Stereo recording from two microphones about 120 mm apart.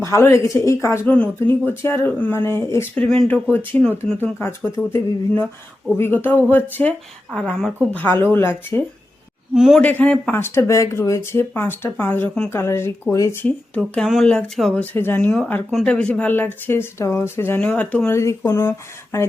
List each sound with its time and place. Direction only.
0.0 s speech: 25° left (ahead or behind)
1.0 s speech: 10° left (ahead or behind)
7.3 s a sound: 5° left (ahead or behind)
7.9 s speech: 15° left (ahead or behind)
9.6 s a sound: 5° right (ahead or behind)
9.8 s speech: 15° left (ahead or behind)
13.4 s speech: 10° left (ahead or behind)
14.1 s a sound: 5° left (ahead or behind)
14.8 s speech: 15° left (ahead or behind)
18.1 s speech: 25° left (ahead or behind)